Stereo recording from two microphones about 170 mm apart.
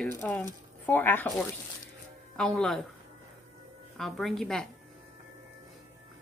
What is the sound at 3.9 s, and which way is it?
Speech, centre (ahead or behind).